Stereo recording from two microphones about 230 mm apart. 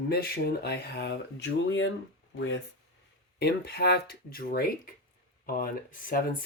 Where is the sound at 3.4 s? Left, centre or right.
Left.